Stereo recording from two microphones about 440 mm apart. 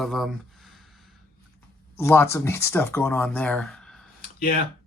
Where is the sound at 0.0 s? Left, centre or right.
Centre.